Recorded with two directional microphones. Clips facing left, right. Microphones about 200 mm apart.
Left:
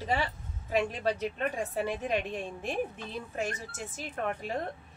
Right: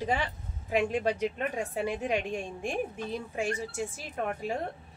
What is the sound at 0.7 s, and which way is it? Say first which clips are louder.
A woman's voice: right 2 dB; 15° right (ahead or behind).